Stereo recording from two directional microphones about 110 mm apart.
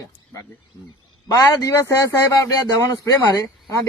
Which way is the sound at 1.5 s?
30° left (ahead or behind).